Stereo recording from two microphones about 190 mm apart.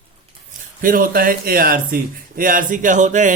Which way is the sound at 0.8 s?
45° right (ahead or behind).